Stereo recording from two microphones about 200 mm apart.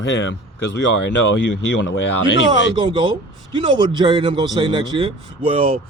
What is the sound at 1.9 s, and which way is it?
Speech, 65° left (ahead or behind).